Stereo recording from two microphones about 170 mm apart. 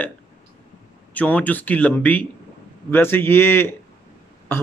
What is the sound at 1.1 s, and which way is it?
A man's voice, 10° left (ahead or behind).